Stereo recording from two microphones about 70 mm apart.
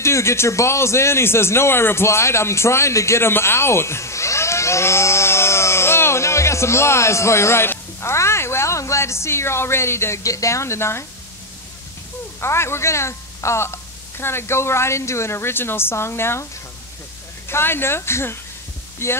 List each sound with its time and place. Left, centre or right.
0.0 s speech: left
12.4 s a woman's voice: left
17.5 s a woman's voice: left